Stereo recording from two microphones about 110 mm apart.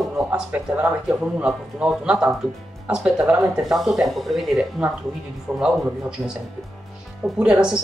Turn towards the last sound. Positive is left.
turn(degrees=-10)  # may be behind; listen again after turning